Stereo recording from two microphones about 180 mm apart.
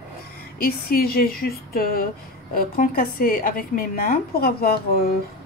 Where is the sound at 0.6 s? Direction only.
55° left (ahead or behind).